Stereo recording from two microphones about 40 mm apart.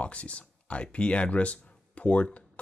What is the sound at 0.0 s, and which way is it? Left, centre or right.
Speech, left.